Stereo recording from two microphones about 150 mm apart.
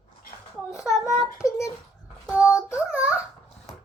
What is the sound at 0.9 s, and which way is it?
Child singing, 20° left (ahead or behind).